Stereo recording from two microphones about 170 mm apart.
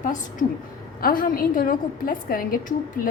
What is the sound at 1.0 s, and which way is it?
A woman's voice, 60° left (ahead or behind).